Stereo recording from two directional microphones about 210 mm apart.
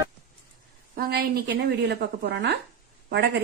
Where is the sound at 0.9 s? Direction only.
45° right (ahead or behind).